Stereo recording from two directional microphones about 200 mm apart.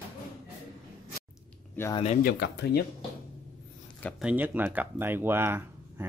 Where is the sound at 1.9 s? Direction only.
35° left (ahead or behind).